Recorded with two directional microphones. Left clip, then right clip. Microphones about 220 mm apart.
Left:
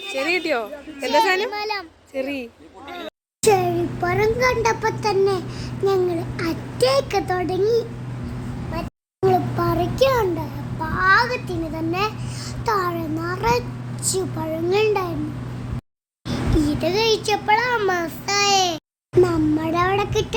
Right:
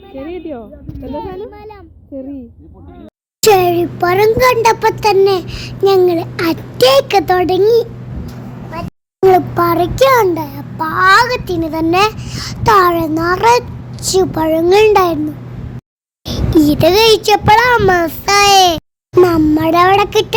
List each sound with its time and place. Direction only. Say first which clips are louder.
0.2 s a child's voice: left 4 dB; 10° left (ahead or behind)
3.4 s a child's voice: right 8 dB; 45° right (ahead or behind)
9.3 s child singing: right 9 dB; 40° right (ahead or behind)
16.2 s a child's voice: right 10 dB; 35° right (ahead or behind)